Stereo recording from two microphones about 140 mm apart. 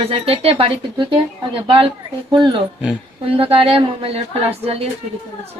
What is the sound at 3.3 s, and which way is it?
A woman's voice, 40° right (ahead or behind).